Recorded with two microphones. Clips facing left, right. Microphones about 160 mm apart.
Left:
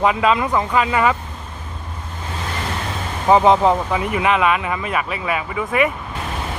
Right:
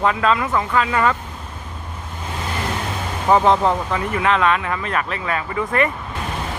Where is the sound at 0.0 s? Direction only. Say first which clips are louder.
Left 2 dB; 15° left (ahead or behind).